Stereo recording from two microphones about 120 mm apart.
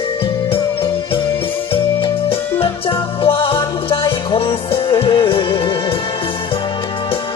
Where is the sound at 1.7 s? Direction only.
50° left (ahead or behind).